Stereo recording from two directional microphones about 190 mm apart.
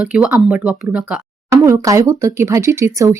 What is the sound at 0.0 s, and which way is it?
Speech, 5° right (ahead or behind).